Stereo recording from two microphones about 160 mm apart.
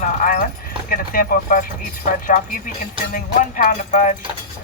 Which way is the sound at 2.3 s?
50° left (ahead or behind).